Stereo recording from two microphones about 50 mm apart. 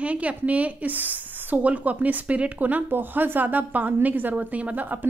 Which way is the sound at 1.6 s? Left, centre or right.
Right.